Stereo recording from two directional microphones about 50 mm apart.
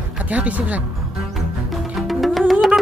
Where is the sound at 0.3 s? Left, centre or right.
Right.